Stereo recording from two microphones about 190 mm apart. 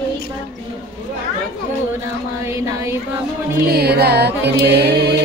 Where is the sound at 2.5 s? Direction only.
15° right (ahead or behind).